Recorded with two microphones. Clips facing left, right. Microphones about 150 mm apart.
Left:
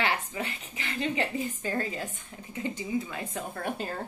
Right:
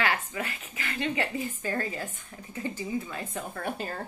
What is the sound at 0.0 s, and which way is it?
A woman's voice, 25° left (ahead or behind).